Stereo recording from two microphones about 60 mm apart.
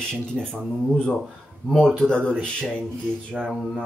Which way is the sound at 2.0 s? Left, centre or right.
Centre.